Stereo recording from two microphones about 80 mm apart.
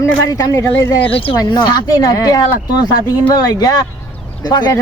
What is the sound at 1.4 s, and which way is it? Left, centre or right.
Speech, left.